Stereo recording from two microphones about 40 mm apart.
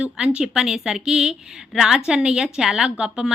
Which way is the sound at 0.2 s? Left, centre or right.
Right.